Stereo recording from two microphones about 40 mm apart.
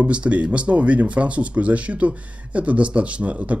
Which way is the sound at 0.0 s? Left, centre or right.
Right.